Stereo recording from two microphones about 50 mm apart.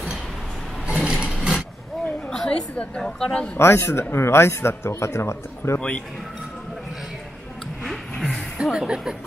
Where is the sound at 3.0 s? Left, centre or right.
Centre.